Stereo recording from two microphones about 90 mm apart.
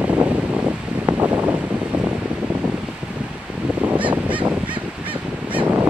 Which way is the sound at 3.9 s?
15° right (ahead or behind).